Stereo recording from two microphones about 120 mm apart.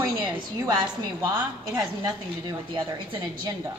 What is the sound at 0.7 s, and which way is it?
A woman's voice, 35° right (ahead or behind).